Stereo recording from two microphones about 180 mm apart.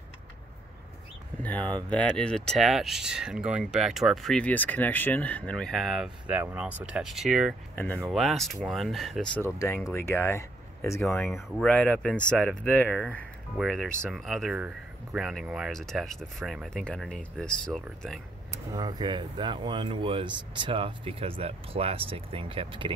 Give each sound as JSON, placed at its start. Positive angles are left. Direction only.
{"t": 1.4, "sound": "speech", "side_deg": 5}
{"t": 7.7, "sound": "speech", "side_deg": 10}
{"t": 8.1, "sound": "speech", "side_deg": 0}
{"t": 11.1, "sound": "speech", "side_deg": 0}
{"t": 18.5, "sound": "speech", "side_deg": -20}